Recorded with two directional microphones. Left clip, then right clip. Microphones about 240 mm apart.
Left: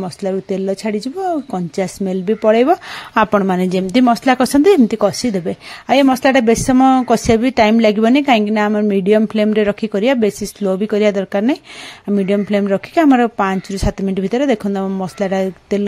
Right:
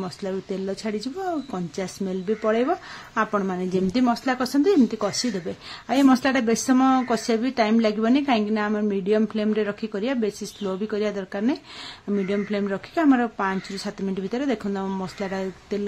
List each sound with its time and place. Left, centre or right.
0.0 s speech: left